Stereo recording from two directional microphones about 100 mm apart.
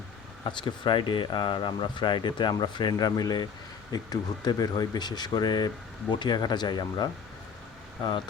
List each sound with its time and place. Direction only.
0.4 s speech: 55° left (ahead or behind)